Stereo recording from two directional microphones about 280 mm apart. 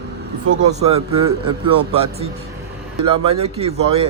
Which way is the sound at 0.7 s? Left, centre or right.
Right.